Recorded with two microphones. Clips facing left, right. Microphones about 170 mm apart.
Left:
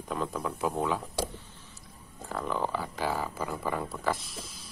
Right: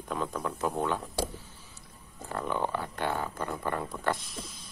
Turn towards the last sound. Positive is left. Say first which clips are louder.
# even
turn(degrees=0)  # may be behind; listen again after turning